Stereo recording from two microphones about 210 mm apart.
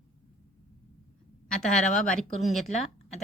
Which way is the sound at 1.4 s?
5° left (ahead or behind).